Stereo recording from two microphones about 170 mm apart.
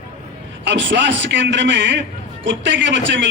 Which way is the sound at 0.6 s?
90° right.